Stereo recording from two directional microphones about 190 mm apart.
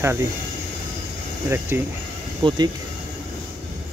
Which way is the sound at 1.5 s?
10° right (ahead or behind).